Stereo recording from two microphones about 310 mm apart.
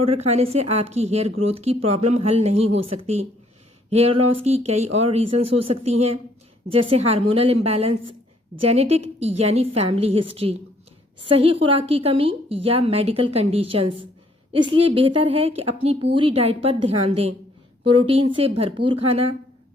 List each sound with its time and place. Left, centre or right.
0.0 s a woman's voice: centre
3.8 s a woman's voice: centre